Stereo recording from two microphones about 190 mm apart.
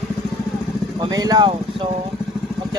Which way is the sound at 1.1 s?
20° right (ahead or behind).